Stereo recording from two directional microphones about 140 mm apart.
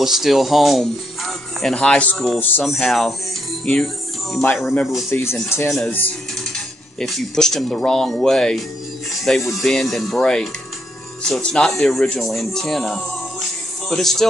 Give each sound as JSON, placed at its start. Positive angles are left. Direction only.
{"t": 0.0, "sound": "speech", "side_deg": 0}
{"t": 5.1, "sound": "speech", "side_deg": 15}
{"t": 9.1, "sound": "music", "side_deg": 0}
{"t": 9.5, "sound": "speech", "side_deg": 0}